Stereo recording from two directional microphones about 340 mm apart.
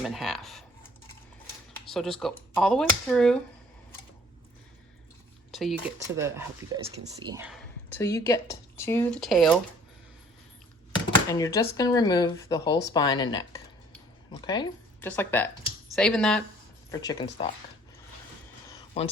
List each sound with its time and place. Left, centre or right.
0.0 s speech: centre
1.9 s speech: centre
5.5 s a sound: centre
6.1 s speech: centre
10.9 s speech: centre
18.7 s a sound: centre